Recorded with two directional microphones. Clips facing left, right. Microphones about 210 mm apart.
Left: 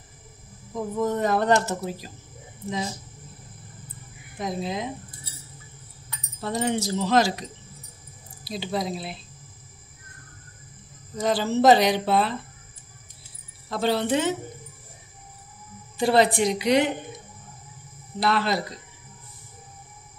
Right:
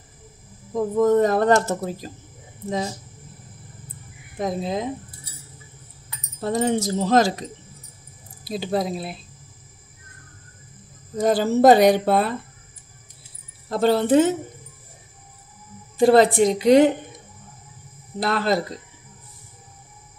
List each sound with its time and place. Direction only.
0.9 s speech: 45° right (ahead or behind)
4.4 s speech: 45° right (ahead or behind)
6.4 s speech: 45° right (ahead or behind)
8.5 s speech: 50° right (ahead or behind)
11.1 s speech: 50° right (ahead or behind)
13.7 s speech: 45° right (ahead or behind)
16.0 s speech: 45° right (ahead or behind)
18.2 s speech: 45° right (ahead or behind)